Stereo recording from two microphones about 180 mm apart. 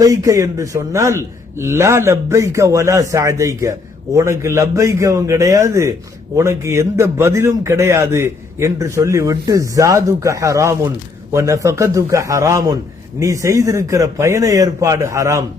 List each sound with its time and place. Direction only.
0.0 s a man's voice: 20° right (ahead or behind)